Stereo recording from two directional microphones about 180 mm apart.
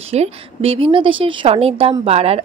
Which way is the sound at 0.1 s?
35° right (ahead or behind).